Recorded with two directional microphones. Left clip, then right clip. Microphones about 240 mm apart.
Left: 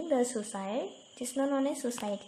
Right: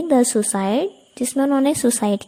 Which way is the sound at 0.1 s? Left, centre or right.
Right.